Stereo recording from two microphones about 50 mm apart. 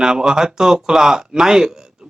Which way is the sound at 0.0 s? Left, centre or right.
Centre.